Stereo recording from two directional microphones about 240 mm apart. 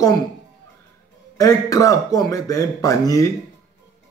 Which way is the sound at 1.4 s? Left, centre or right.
Centre.